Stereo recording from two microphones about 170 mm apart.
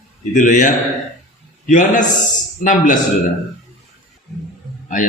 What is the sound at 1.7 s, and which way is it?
A man's voice, 50° left (ahead or behind).